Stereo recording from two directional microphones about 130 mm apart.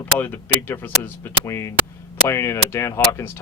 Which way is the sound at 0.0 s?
15° left (ahead or behind).